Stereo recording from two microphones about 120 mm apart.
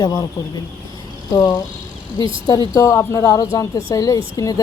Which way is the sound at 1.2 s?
30° left (ahead or behind).